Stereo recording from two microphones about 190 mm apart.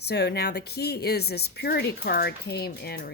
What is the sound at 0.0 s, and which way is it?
Speech, 60° left (ahead or behind).